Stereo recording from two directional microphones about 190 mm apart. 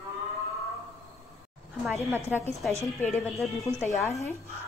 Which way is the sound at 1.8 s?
Centre (ahead or behind).